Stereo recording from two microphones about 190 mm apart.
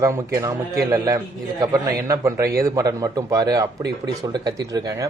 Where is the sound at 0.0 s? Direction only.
15° right (ahead or behind).